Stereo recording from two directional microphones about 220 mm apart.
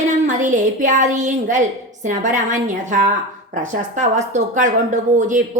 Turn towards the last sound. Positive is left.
turn(degrees=-35)  # may be behind; listen again after turning